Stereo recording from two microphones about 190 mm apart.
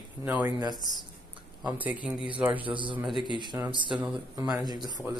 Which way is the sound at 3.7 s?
25° right (ahead or behind).